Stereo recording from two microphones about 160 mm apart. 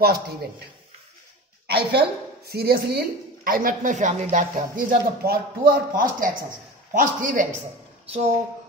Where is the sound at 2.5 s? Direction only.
75° right (ahead or behind); by 7.4 s 55° right (ahead or behind).